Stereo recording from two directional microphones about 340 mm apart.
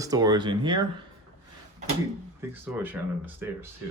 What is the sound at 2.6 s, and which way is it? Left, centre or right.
Speech, centre.